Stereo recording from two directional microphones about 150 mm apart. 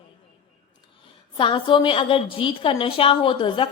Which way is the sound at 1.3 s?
35° left (ahead or behind).